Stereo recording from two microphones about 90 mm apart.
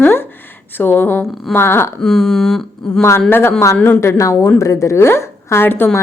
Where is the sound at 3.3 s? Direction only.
25° left (ahead or behind).